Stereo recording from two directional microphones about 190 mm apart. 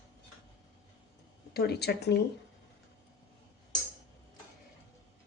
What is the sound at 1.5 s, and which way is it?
Speech, 60° left (ahead or behind).